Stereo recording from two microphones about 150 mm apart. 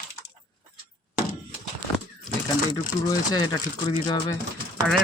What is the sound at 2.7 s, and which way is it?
Speech, 25° left (ahead or behind).